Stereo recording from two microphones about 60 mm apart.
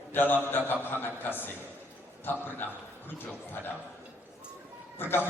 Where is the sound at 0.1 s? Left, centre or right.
Left.